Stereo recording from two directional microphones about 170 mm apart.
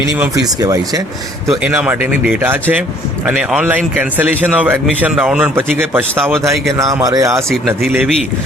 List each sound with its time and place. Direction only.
0.6 s speech: 20° right (ahead or behind)
1.5 s a man's voice: 5° right (ahead or behind)
7.8 s speech: centre (ahead or behind)